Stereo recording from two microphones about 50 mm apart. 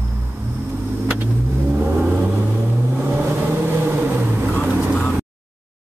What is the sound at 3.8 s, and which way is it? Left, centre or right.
Vehicle, right.